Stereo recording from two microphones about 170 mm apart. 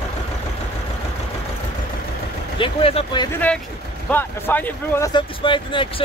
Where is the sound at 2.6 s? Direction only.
35° left (ahead or behind).